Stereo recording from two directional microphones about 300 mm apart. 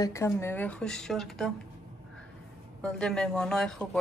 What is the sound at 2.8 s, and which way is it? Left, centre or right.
A man's voice, centre.